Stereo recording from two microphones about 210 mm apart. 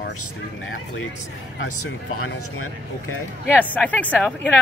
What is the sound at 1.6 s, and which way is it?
Speech, 90° left.